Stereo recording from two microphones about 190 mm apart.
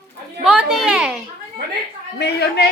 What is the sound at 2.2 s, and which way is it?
Speech, 60° left (ahead or behind).